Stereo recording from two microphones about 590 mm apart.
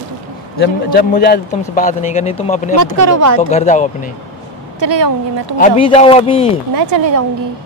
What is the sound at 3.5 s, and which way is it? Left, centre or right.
Speech, centre.